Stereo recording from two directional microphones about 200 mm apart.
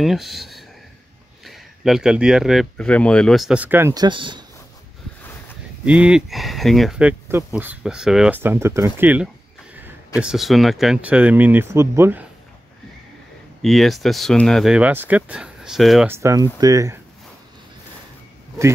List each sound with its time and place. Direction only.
0.0 s speech: centre (ahead or behind); by 4.5 s 25° right (ahead or behind)
5.9 s speech: 5° right (ahead or behind)
13.6 s speech: centre (ahead or behind)
16.1 s speech: 15° right (ahead or behind)